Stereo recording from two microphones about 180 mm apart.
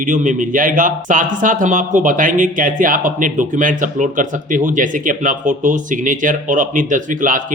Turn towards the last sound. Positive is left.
turn(degrees=-50)  # may be behind; listen again after turning